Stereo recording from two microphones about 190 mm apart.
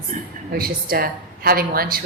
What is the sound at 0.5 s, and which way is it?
A woman's voice, 55° right (ahead or behind).